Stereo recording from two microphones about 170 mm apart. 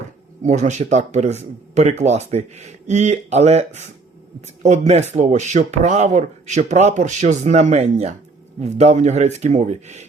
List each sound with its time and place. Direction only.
0.4 s speech: 45° right (ahead or behind)